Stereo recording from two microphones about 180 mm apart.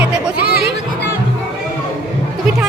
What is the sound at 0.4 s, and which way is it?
Music, 65° right (ahead or behind).